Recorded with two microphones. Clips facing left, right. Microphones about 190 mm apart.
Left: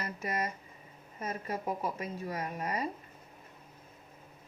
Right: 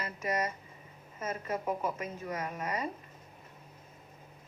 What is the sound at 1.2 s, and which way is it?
Speech, 35° left (ahead or behind).